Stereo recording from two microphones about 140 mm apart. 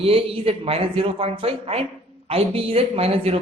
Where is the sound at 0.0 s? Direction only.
45° right (ahead or behind).